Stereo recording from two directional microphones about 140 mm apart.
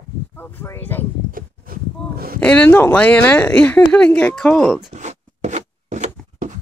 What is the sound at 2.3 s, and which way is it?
Speech, 10° left (ahead or behind).